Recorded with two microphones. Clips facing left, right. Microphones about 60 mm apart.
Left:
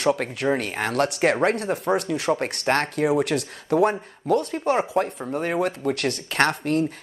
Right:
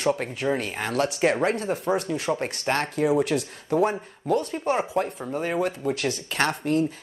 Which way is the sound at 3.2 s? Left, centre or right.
Left.